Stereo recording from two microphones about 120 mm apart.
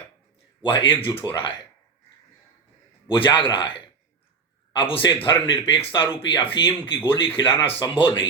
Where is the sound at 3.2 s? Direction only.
45° left (ahead or behind).